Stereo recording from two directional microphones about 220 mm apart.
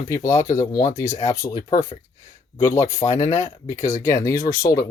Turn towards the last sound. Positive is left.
turn(degrees=15)  # may be behind; listen again after turning